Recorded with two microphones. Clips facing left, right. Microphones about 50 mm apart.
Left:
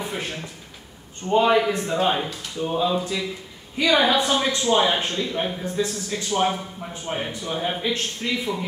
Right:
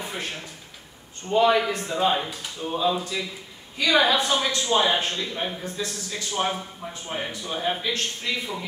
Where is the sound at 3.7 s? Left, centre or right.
Left.